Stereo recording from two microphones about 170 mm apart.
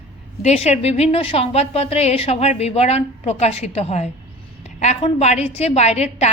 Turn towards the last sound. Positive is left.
turn(degrees=40)  # may be behind; listen again after turning